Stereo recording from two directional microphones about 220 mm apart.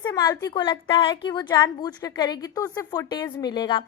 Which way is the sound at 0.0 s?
15° left (ahead or behind).